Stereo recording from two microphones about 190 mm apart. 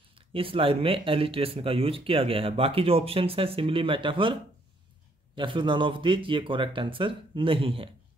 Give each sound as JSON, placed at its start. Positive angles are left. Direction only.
{"t": 0.1, "sound": "speech", "side_deg": -30}